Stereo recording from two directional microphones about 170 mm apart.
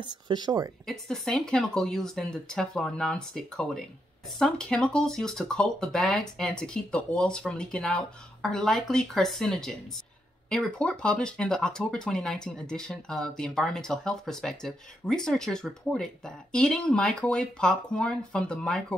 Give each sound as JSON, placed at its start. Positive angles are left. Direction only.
{"t": 0.0, "sound": "speech", "side_deg": -25}
{"t": 0.8, "sound": "speech", "side_deg": 0}